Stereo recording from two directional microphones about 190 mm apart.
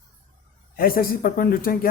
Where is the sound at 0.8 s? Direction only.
50° left (ahead or behind).